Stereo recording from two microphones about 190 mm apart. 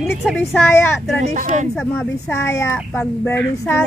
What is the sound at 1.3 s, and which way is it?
Speech, 45° right (ahead or behind).